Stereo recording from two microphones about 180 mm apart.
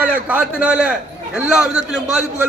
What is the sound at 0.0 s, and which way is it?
A man's voice, 10° right (ahead or behind).